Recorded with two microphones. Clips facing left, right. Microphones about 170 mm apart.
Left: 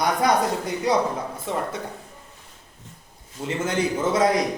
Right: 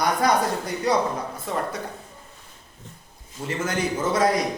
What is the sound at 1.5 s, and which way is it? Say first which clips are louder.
Speech: even; 25° left (ahead or behind).